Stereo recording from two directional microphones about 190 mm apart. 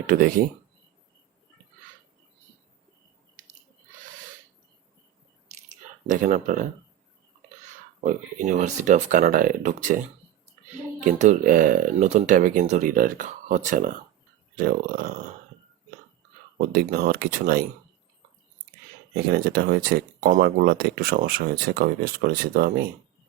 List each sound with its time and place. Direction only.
0.1 s speech: 50° right (ahead or behind)
5.5 s a sound: 40° right (ahead or behind)
8.0 s speech: 40° right (ahead or behind)
11.0 s speech: 40° right (ahead or behind)
16.6 s speech: 50° right (ahead or behind)
19.1 s speech: 55° right (ahead or behind)